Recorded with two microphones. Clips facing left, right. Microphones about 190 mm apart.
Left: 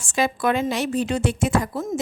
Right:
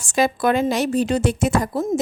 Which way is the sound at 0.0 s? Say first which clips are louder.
Right 3 dB; 40° right (ahead or behind).